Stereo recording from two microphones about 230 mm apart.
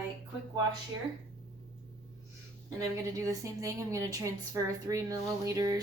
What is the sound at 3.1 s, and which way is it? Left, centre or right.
A woman's voice, centre.